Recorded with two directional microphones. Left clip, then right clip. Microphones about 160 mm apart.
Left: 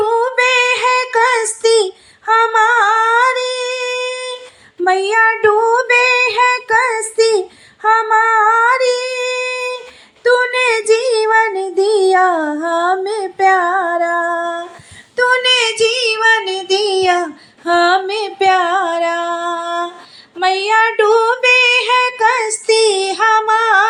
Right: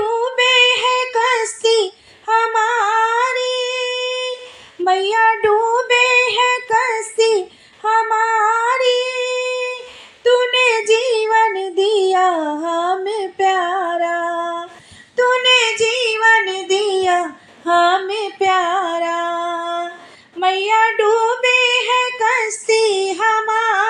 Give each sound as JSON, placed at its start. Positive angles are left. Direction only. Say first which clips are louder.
{"t": 0.0, "sound": "child singing", "louder": "left 3 dB", "side_deg": 25}
{"t": 2.2, "sound": "singing", "louder": "left 4 dB", "side_deg": 25}
{"t": 4.8, "sound": "child singing", "louder": "left 2 dB", "side_deg": 25}
{"t": 17.7, "sound": "music", "louder": "left 2 dB", "side_deg": 35}
{"t": 20.4, "sound": "child singing", "louder": "left 2 dB", "side_deg": 30}